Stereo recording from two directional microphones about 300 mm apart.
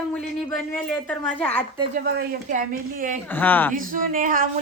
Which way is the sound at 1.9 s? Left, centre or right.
Right.